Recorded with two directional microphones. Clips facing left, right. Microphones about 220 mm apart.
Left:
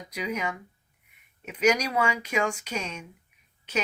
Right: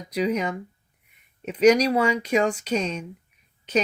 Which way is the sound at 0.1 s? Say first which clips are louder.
Right 8 dB; 35° right (ahead or behind).